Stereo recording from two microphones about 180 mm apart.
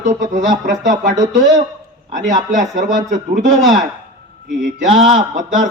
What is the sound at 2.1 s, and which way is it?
Speech, 45° right (ahead or behind).